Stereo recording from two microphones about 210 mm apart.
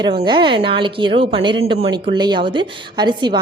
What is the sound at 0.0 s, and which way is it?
A woman's voice, 20° right (ahead or behind).